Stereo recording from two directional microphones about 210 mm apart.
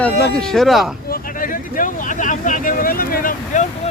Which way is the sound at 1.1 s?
40° left (ahead or behind).